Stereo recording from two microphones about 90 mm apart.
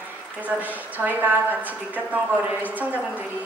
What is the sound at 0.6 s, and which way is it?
A woman's voice, 20° right (ahead or behind).